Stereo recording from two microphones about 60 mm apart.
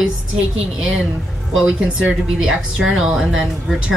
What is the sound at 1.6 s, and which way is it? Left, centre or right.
Speech, centre.